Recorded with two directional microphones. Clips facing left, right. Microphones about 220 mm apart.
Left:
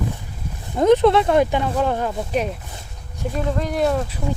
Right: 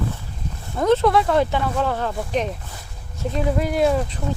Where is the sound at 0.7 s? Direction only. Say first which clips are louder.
Left 3 dB; 15° left (ahead or behind).